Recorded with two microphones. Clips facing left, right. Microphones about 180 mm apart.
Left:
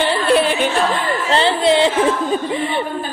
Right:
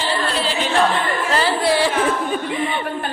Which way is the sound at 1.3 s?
25° left (ahead or behind).